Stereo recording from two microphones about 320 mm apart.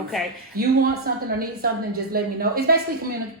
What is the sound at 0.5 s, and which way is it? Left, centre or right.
A woman's voice, right.